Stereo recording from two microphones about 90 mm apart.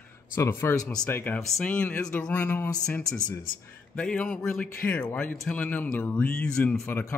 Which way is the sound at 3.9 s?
10° left (ahead or behind).